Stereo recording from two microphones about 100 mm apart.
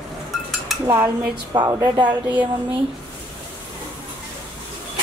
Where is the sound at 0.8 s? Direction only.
30° right (ahead or behind).